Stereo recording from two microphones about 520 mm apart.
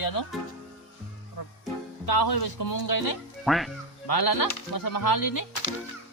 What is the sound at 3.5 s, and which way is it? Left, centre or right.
Speech, centre.